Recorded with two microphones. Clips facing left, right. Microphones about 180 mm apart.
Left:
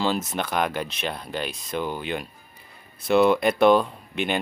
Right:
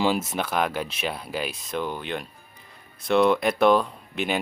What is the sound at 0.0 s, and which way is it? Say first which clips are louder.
Speech: right 1 dB; 10° right (ahead or behind).